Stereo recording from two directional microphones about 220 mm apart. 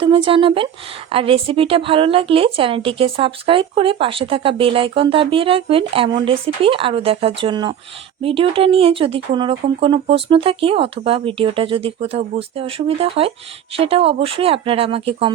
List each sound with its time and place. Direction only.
0.0 s a woman's voice: 25° right (ahead or behind)